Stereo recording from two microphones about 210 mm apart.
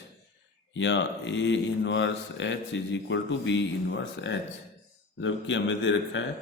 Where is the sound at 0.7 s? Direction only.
60° left (ahead or behind).